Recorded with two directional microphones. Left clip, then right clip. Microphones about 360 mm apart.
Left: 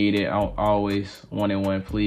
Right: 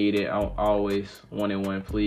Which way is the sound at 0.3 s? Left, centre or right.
Left.